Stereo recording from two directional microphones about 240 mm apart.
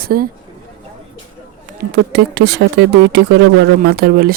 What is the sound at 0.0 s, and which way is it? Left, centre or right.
Speech, right.